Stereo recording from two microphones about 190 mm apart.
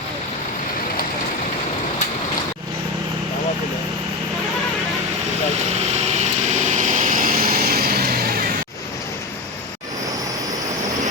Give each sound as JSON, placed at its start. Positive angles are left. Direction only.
{"t": 6.5, "sound": "vehicle", "side_deg": -40}